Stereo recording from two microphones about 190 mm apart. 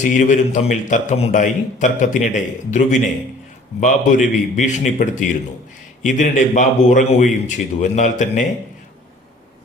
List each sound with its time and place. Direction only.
0.0 s a man's voice: 40° left (ahead or behind)